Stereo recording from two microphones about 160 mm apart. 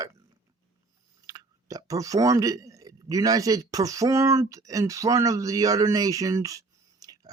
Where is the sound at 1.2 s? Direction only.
20° right (ahead or behind).